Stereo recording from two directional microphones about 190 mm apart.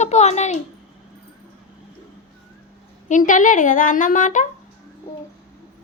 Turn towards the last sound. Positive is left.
turn(degrees=40)  # may be behind; listen again after turning